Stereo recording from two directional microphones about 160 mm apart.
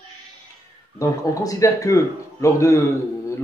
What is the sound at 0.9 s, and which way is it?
Speech, 20° left (ahead or behind).